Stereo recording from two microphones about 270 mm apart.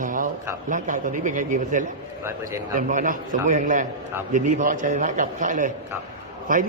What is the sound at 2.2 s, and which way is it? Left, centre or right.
Speech, centre.